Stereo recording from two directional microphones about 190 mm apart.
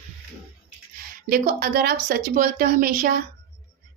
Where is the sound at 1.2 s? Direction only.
50° right (ahead or behind).